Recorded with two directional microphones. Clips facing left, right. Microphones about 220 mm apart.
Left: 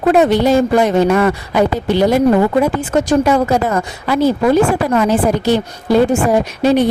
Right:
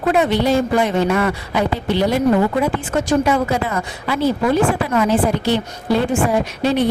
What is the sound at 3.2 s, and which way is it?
A woman's voice, 45° left (ahead or behind).